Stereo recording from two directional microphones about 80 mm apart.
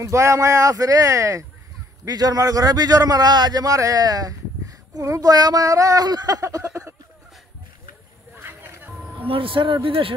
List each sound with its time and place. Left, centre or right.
0.0 s a man's voice: right
2.0 s a man's voice: right
8.4 s music: right
9.5 s speech: right